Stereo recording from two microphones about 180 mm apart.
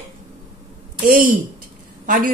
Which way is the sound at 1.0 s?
50° right (ahead or behind).